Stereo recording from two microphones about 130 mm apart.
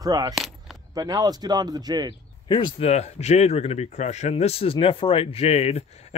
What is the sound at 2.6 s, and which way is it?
Speech, 50° left (ahead or behind).